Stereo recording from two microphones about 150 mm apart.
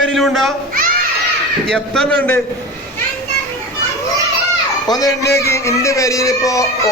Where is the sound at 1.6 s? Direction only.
5° left (ahead or behind).